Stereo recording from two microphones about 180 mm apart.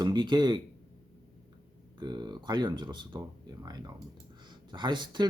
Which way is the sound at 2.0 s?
25° right (ahead or behind).